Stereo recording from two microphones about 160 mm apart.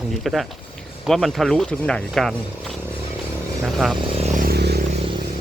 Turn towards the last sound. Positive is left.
turn(degrees=-90)